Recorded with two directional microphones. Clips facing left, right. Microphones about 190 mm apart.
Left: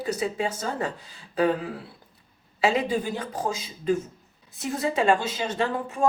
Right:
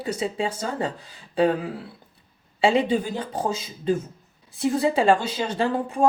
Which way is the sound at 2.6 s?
30° right (ahead or behind).